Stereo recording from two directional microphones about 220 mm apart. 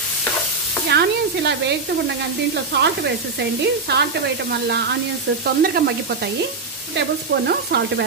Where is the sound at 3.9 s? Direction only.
50° right (ahead or behind).